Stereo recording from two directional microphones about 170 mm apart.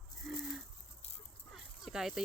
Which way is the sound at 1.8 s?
Centre (ahead or behind).